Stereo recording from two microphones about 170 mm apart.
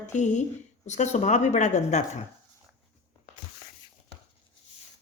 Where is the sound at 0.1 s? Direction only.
45° left (ahead or behind).